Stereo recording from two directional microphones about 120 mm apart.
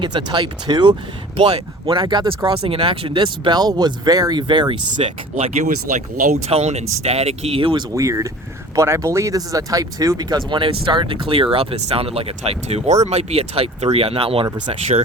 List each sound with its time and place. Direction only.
0.0 s speech: 40° right (ahead or behind)
1.4 s speech: 50° right (ahead or behind)
5.3 s speech: 90° right
6.5 s speech: 65° right (ahead or behind); by 7.9 s 45° right (ahead or behind)
7.9 s speech: 25° right (ahead or behind); by 14.4 s 50° right (ahead or behind)
14.7 s speech: 65° right (ahead or behind)